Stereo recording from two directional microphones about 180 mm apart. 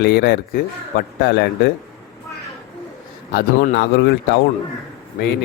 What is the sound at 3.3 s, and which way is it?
Speech, 70° left (ahead or behind).